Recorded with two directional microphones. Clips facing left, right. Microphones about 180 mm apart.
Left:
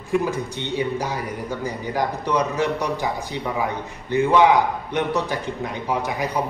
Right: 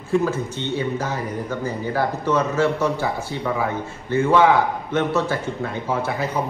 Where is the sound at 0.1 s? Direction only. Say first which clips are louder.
Right 2 dB; 15° left (ahead or behind).